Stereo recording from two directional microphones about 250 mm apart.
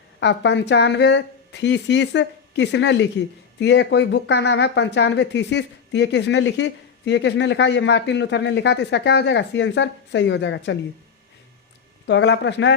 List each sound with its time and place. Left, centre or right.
0.2 s speech: left
12.0 s speech: left